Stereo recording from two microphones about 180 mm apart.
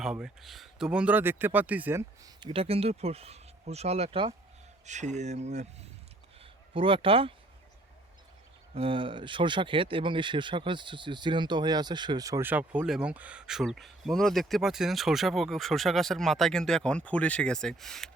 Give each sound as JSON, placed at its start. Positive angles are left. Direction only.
{"t": 0.0, "sound": "speech", "side_deg": -5}
{"t": 2.4, "sound": "speech", "side_deg": -30}
{"t": 8.7, "sound": "speech", "side_deg": -30}